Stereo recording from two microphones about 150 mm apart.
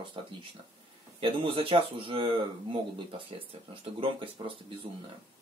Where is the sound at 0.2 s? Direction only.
35° right (ahead or behind).